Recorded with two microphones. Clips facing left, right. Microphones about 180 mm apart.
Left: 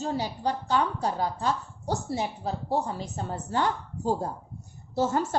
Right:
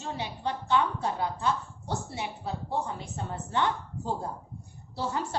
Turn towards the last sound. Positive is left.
turn(degrees=45)  # may be behind; listen again after turning